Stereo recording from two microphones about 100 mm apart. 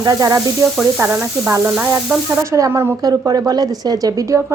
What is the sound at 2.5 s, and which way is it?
Speech, 30° right (ahead or behind).